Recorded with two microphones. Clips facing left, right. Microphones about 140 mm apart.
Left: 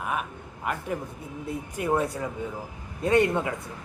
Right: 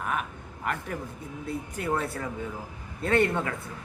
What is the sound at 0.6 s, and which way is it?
A man's voice, 15° left (ahead or behind).